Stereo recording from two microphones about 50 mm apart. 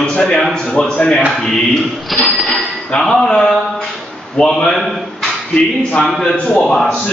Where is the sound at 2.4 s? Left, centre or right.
Centre.